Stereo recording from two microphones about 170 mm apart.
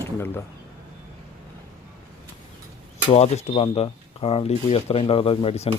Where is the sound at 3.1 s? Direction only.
40° left (ahead or behind).